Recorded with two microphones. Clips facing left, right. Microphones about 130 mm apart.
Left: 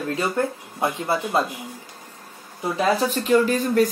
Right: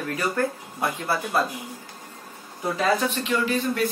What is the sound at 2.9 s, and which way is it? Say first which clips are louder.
Speech: left 5 dB; 40° left (ahead or behind).